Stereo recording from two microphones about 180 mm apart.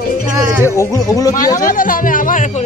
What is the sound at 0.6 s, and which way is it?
Speech, 15° left (ahead or behind).